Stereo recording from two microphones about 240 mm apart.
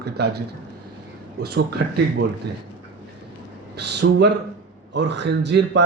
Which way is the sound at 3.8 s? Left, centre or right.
Right.